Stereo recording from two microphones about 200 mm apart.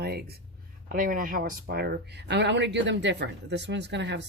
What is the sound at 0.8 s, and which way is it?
Speech, 40° right (ahead or behind).